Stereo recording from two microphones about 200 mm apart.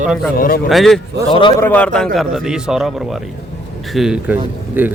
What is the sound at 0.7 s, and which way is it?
Speech, centre (ahead or behind).